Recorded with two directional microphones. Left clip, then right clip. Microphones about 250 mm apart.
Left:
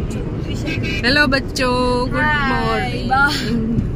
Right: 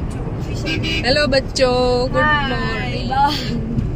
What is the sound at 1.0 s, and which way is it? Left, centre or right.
Speech, left.